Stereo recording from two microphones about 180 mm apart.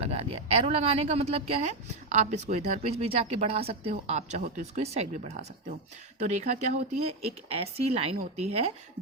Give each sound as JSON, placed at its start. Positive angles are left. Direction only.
{"t": 0.0, "sound": "a woman's voice", "side_deg": -35}